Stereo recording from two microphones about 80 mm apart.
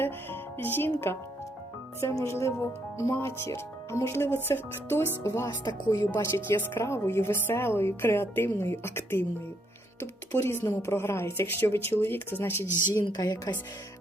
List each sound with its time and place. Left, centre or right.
0.0 s a woman's voice: left
5.6 s speech: left
6.3 s a woman's voice: left
10.3 s a woman's voice: left
13.1 s speech: left